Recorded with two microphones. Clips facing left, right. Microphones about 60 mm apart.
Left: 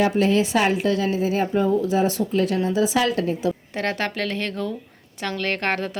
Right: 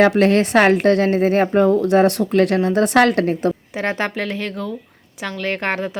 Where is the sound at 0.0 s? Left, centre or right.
Right.